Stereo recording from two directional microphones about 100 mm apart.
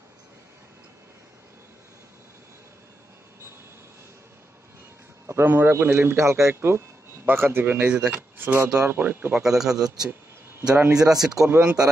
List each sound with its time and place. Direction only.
5.2 s a man's voice: 25° right (ahead or behind)
9.4 s a man's voice: 5° right (ahead or behind)
11.0 s speech: 35° right (ahead or behind)
11.6 s a man's voice: 10° right (ahead or behind)